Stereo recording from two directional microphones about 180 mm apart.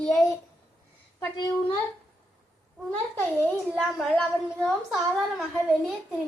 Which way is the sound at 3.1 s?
5° left (ahead or behind).